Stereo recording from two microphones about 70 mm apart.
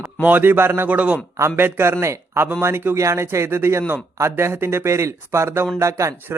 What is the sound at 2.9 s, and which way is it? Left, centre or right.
Speech, right.